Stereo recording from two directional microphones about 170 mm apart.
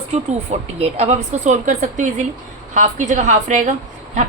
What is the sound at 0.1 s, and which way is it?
A woman's voice, 40° right (ahead or behind).